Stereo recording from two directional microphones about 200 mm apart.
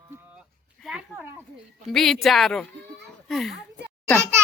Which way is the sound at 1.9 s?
Centre (ahead or behind).